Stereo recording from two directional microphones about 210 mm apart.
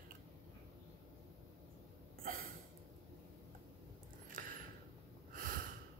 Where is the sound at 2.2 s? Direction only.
40° right (ahead or behind).